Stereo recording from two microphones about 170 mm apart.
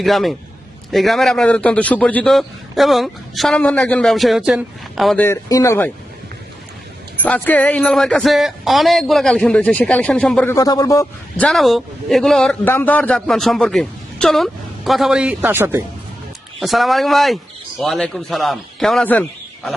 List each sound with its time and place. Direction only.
0.0 s a man's voice: centre (ahead or behind)
5.2 s speech: 20° left (ahead or behind)
7.2 s a man's voice: 10° left (ahead or behind)
10.5 s speech: 20° left (ahead or behind)
11.3 s a man's voice: 5° left (ahead or behind); by 15.8 s 15° right (ahead or behind)
16.6 s a man's voice: centre (ahead or behind)